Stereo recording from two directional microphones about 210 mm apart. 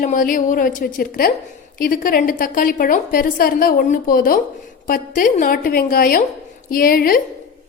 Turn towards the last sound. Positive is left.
turn(degrees=45)  # may be behind; listen again after turning